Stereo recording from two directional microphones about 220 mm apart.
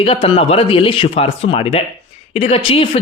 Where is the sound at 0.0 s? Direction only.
25° left (ahead or behind).